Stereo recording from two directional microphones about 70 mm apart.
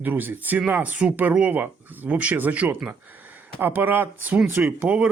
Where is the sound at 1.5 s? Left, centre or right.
Right.